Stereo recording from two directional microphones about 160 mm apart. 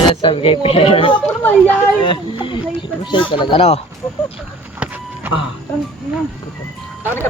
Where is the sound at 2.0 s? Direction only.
30° left (ahead or behind).